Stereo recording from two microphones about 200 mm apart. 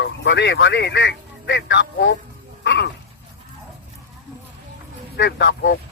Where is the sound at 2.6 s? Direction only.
60° left (ahead or behind).